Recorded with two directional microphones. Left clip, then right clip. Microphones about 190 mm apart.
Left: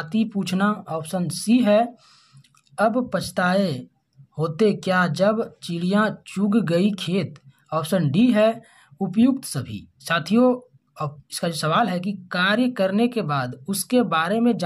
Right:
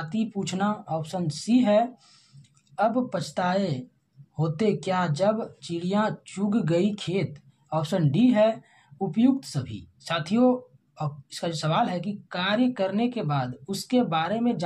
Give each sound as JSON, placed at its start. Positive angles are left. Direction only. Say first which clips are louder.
{"t": 0.0, "sound": "speech", "louder": "left 5 dB", "side_deg": 30}